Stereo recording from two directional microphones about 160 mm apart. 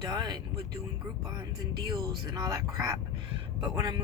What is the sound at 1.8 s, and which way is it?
Speech, 25° right (ahead or behind).